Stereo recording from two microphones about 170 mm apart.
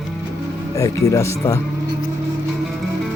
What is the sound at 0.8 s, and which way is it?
Speech, 20° left (ahead or behind).